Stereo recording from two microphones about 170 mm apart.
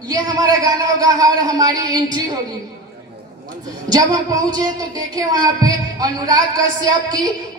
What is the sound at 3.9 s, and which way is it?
Music, 20° right (ahead or behind).